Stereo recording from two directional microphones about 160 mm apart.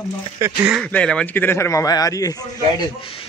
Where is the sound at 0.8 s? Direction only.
5° left (ahead or behind).